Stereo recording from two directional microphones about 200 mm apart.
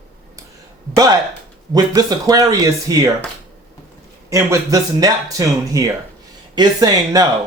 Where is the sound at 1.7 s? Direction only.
20° right (ahead or behind).